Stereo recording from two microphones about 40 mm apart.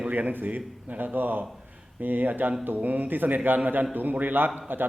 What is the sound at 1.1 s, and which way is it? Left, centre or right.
A man's voice, right.